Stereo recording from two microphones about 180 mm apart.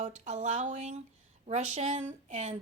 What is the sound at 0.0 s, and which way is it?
A woman's voice, 40° right (ahead or behind).